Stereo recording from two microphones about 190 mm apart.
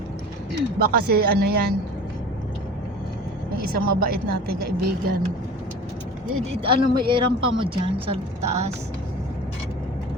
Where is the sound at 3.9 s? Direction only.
50° right (ahead or behind).